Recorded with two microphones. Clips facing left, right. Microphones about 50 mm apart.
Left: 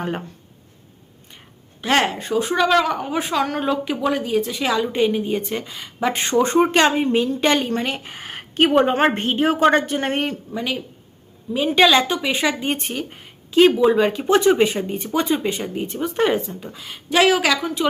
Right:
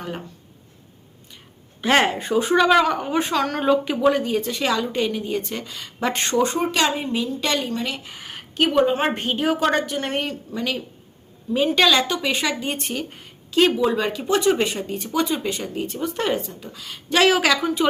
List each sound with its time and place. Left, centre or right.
1.8 s a woman's voice: centre
6.3 s a woman's voice: left
9.2 s speech: left
10.5 s speech: centre
12.5 s a woman's voice: left
12.8 s speech: centre
14.1 s speech: left
17.1 s a woman's voice: centre